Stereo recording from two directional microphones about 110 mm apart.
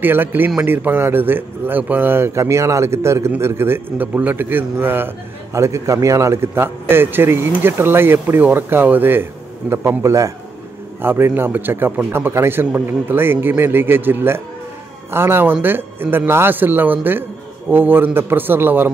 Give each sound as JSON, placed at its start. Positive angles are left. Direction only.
{"t": 0.0, "sound": "a man's voice", "side_deg": -20}